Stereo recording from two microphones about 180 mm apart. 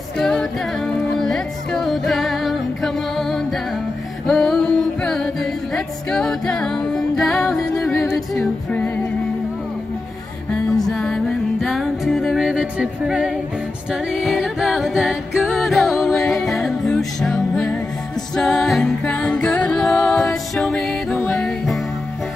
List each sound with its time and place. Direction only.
0.2 s music: 5° left (ahead or behind)
10.5 s music: 5° left (ahead or behind)
14.1 s a capella: centre (ahead or behind)
18.3 s music: 5° left (ahead or behind)